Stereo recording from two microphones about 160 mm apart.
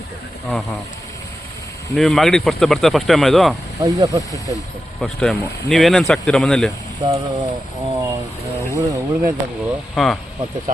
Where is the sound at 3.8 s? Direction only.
20° right (ahead or behind).